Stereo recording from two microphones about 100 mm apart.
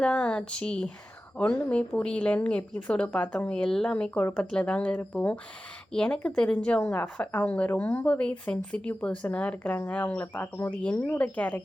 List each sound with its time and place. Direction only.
0.0 s a woman's voice: 10° left (ahead or behind)